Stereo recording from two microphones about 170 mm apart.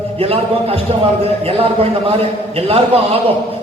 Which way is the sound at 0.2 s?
35° right (ahead or behind).